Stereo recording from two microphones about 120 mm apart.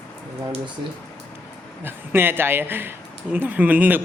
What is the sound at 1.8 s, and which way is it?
Speech, 20° right (ahead or behind).